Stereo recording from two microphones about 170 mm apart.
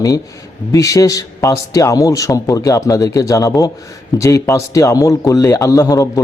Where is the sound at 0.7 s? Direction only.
20° left (ahead or behind).